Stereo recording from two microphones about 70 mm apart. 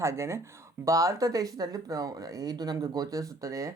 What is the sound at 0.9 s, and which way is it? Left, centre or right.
Speech, right.